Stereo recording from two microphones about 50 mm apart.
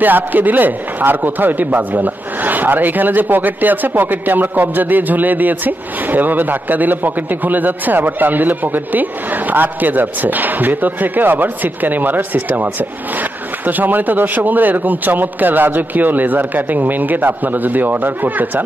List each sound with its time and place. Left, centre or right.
0.0 s a man's voice: right